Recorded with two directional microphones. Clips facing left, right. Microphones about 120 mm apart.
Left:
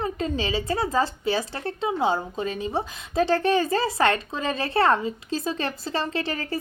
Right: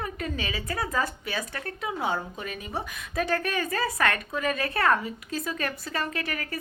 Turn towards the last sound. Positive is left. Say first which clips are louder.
# left 5 dB
turn(degrees=30)  # may be behind; listen again after turning